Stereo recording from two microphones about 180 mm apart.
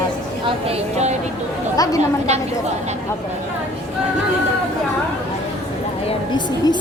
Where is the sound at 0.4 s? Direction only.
35° right (ahead or behind).